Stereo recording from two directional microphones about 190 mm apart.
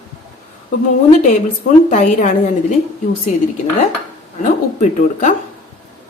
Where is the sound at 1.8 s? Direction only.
40° left (ahead or behind).